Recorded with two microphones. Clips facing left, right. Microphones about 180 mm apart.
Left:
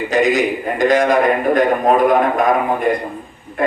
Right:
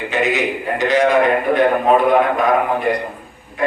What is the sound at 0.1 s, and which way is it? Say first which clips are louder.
A man's voice: left 4 dB; 45° left (ahead or behind).